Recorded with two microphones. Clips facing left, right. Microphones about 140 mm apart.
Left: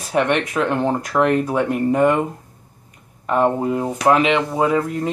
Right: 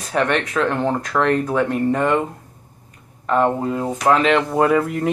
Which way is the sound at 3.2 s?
15° left (ahead or behind).